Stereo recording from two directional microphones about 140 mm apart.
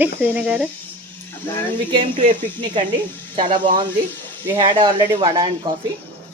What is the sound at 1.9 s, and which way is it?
Speech, 40° right (ahead or behind).